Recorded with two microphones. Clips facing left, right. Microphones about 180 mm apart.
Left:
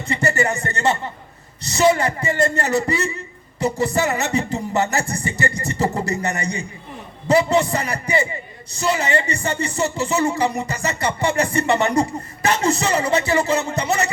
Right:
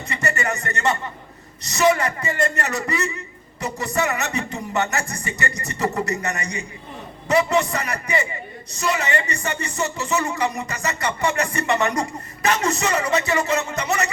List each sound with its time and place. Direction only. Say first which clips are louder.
0.0 s speech: left 5 dB; 30° left (ahead or behind)